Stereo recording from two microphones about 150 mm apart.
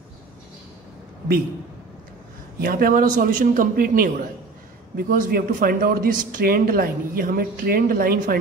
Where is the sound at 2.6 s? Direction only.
75° right (ahead or behind).